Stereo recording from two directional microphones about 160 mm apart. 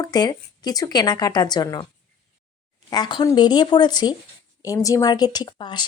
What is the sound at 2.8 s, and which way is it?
A woman's voice, 25° left (ahead or behind).